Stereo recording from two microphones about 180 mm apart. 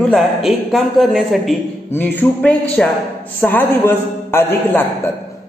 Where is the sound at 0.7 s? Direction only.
Centre (ahead or behind).